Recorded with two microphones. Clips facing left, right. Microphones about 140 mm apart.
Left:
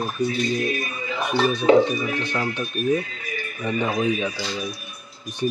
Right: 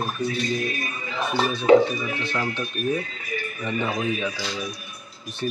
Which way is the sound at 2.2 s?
15° left (ahead or behind).